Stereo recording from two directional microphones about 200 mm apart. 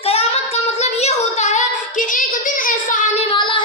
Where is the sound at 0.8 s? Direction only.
35° left (ahead or behind).